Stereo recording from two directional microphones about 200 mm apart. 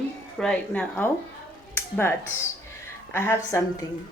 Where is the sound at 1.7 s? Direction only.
10° left (ahead or behind).